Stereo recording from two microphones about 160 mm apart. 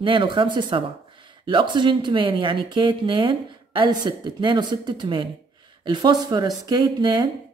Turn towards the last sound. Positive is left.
turn(degrees=-25)  # may be behind; listen again after turning